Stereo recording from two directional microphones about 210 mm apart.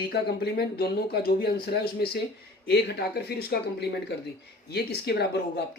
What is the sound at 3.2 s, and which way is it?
Speech, 50° left (ahead or behind).